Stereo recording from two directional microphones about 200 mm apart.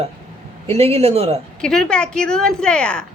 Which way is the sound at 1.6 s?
5° left (ahead or behind).